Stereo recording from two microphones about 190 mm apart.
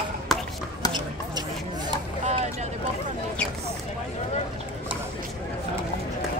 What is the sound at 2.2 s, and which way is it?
Vehicle, 35° right (ahead or behind).